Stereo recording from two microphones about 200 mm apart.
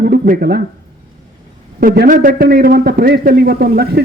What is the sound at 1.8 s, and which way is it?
A man's voice, 50° right (ahead or behind).